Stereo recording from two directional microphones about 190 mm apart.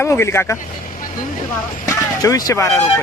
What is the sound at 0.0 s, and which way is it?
Speech, 15° left (ahead or behind).